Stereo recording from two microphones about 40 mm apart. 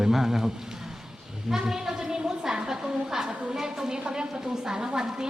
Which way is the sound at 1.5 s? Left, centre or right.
Centre.